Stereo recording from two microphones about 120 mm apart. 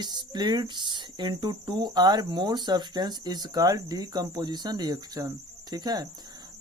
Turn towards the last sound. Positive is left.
turn(degrees=-35)  # may be behind; listen again after turning